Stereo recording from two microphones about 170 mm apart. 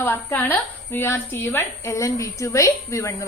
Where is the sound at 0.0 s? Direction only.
15° left (ahead or behind).